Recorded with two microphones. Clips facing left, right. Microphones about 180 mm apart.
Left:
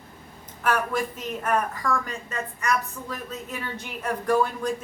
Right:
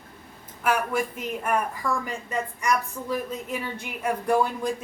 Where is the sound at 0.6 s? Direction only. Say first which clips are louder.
Even; 10° right (ahead or behind).